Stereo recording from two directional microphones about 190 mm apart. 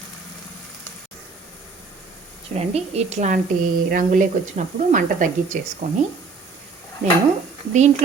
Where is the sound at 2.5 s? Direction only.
35° right (ahead or behind).